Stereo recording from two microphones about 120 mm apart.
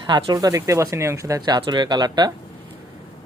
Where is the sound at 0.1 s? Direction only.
35° right (ahead or behind).